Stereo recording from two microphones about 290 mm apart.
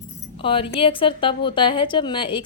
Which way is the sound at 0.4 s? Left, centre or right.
Centre.